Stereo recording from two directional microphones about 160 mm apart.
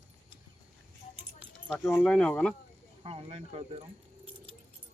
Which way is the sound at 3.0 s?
35° right (ahead or behind).